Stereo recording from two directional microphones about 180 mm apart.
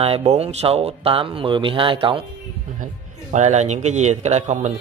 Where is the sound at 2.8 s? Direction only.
40° right (ahead or behind).